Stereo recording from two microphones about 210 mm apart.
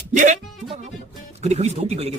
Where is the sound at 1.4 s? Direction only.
30° right (ahead or behind).